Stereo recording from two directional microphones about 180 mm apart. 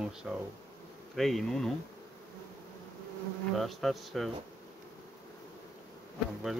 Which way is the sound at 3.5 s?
Centre (ahead or behind).